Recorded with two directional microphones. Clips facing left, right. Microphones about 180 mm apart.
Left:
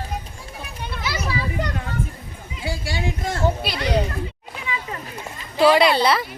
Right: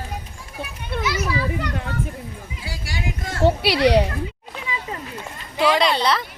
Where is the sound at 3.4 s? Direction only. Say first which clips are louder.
Right 8 dB; 75° right (ahead or behind).